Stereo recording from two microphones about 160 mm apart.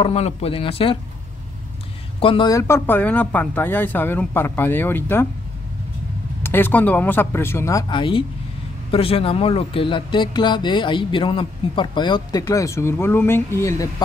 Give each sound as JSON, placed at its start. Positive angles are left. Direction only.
{"t": 0.0, "sound": "speech", "side_deg": 40}
{"t": 2.1, "sound": "speech", "side_deg": 35}
{"t": 2.5, "sound": "speech", "side_deg": 15}
{"t": 6.4, "sound": "speech", "side_deg": 15}
{"t": 7.9, "sound": "speech", "side_deg": 35}